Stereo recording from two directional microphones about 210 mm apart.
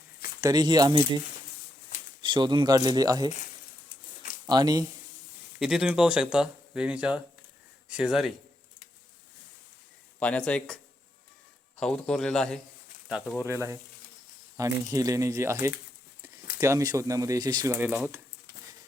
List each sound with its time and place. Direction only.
0.4 s speech: 20° right (ahead or behind)
2.2 s speech: 20° right (ahead or behind)
4.4 s speech: 20° right (ahead or behind)
5.5 s speech: centre (ahead or behind)
10.2 s speech: 5° left (ahead or behind)
11.8 s speech: 5° left (ahead or behind)